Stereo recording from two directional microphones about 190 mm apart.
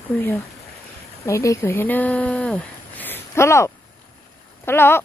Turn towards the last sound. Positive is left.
turn(degrees=10)  # may be behind; listen again after turning